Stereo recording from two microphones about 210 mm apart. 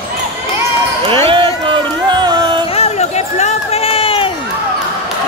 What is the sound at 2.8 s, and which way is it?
Run, 30° left (ahead or behind).